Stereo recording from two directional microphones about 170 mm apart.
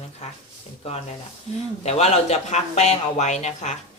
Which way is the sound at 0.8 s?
35° left (ahead or behind).